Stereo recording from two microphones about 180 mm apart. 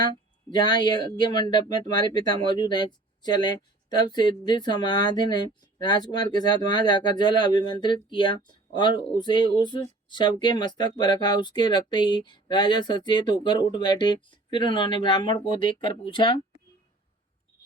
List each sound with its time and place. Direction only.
0.5 s speech: 25° left (ahead or behind)